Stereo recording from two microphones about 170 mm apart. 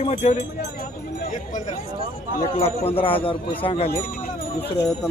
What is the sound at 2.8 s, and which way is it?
Speech, 35° left (ahead or behind).